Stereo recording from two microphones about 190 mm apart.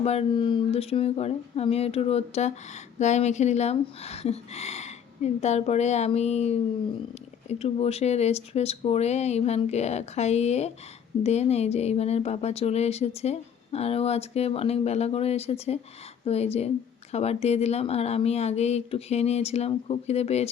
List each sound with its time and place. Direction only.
0.0 s speech: 35° left (ahead or behind)